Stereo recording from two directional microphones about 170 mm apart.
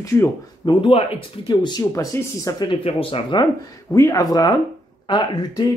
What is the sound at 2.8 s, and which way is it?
Speech, 35° left (ahead or behind).